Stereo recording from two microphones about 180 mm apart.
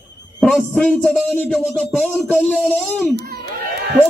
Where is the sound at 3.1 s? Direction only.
60° right (ahead or behind).